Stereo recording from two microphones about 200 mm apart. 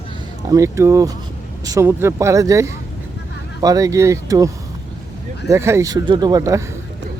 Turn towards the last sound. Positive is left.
turn(degrees=-15)  # may be behind; listen again after turning